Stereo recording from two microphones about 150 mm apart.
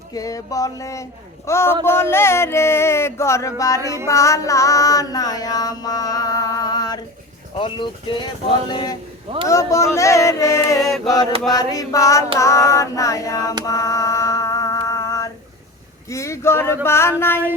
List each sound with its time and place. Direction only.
0.1 s music: 25° left (ahead or behind)
1.5 s a sound: 15° left (ahead or behind)
3.8 s music: 20° right (ahead or behind)
4.0 s music: 20° left (ahead or behind)
7.6 s speech: 30° left (ahead or behind)
8.7 s music: 25° left (ahead or behind)
10.8 s chant: centre (ahead or behind)
11.4 s music: 25° left (ahead or behind)
13.7 s a sound: 25° left (ahead or behind)
16.0 s music: 20° left (ahead or behind)
16.8 s a sound: 15° left (ahead or behind)